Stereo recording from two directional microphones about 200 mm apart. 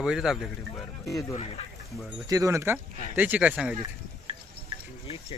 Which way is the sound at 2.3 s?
15° right (ahead or behind).